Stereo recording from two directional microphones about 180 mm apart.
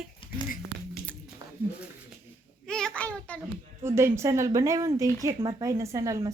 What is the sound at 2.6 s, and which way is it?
Child singing, 5° left (ahead or behind).